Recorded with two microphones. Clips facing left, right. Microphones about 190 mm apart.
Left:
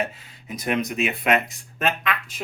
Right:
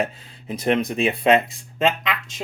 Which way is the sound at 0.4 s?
30° right (ahead or behind).